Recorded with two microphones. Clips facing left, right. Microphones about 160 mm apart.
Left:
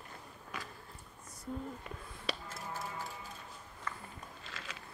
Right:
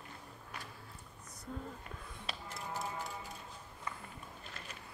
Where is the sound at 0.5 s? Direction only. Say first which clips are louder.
Left 4 dB; 90° left.